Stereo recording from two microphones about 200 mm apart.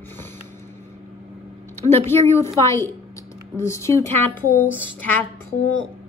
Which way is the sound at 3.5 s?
15° left (ahead or behind).